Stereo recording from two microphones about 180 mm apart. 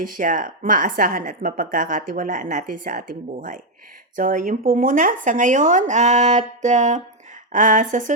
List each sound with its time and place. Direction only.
0.0 s a woman's voice: 50° right (ahead or behind)